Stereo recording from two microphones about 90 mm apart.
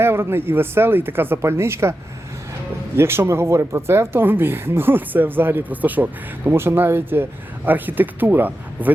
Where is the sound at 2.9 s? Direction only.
30° right (ahead or behind).